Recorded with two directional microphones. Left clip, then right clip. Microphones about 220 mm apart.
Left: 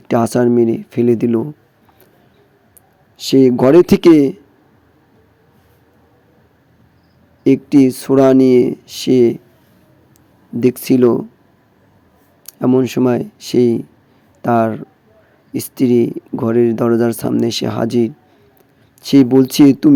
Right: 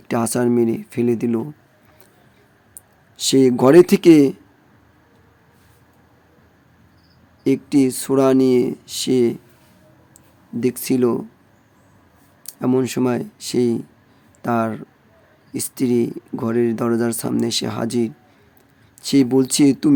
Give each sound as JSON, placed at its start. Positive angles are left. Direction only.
{"t": 0.1, "sound": "speech", "side_deg": 10}
{"t": 3.2, "sound": "speech", "side_deg": 5}
{"t": 7.4, "sound": "speech", "side_deg": 15}
{"t": 10.6, "sound": "speech", "side_deg": 15}
{"t": 12.5, "sound": "speech", "side_deg": 10}